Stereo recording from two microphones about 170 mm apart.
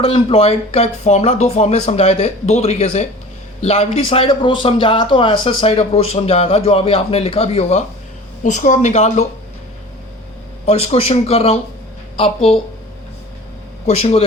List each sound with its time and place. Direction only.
0.0 s speech: 35° left (ahead or behind)
10.7 s speech: 40° left (ahead or behind)
13.8 s speech: 40° left (ahead or behind)